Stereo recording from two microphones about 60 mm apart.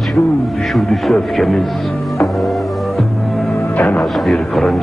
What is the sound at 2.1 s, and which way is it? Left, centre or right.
Music, centre.